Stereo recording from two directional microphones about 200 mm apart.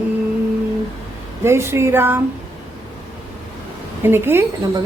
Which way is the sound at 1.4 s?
10° right (ahead or behind).